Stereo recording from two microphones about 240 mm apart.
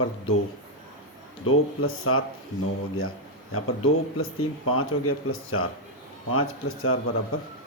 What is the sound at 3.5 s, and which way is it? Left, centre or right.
Speech, left.